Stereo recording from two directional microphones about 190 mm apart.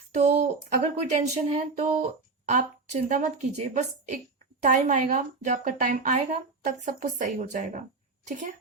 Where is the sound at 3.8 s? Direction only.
40° right (ahead or behind).